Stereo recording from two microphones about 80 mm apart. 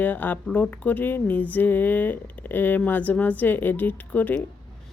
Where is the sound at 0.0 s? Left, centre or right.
Left.